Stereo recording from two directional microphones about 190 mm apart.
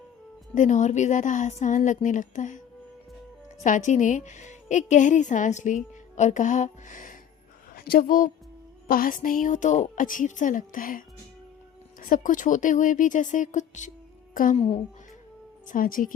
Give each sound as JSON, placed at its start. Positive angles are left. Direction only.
{"t": 0.5, "sound": "a woman's voice", "side_deg": 40}
{"t": 3.6, "sound": "a woman's voice", "side_deg": 40}
{"t": 14.5, "sound": "speech", "side_deg": 30}
{"t": 15.6, "sound": "a woman's voice", "side_deg": 45}